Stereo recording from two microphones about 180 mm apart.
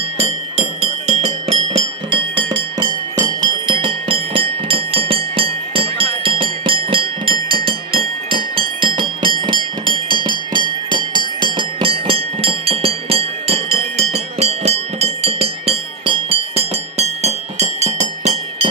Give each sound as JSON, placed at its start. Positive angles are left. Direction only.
{"t": 0.2, "sound": "music", "side_deg": -35}